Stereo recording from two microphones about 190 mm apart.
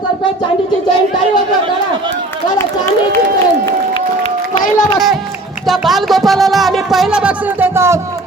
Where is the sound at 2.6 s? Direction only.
15° left (ahead or behind).